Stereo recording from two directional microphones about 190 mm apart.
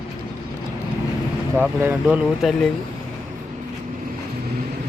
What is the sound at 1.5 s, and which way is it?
Speech, 15° right (ahead or behind).